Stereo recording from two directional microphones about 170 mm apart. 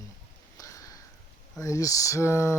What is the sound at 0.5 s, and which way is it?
Sniff, 20° left (ahead or behind).